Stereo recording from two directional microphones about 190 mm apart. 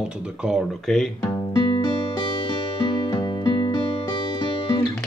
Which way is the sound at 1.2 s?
20° left (ahead or behind).